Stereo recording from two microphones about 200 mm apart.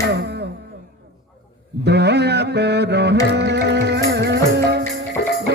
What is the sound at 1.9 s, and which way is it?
Mantra, 55° right (ahead or behind).